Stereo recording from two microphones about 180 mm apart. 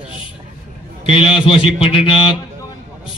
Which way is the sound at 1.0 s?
30° left (ahead or behind).